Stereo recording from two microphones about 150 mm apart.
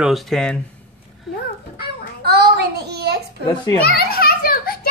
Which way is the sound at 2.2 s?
90° right.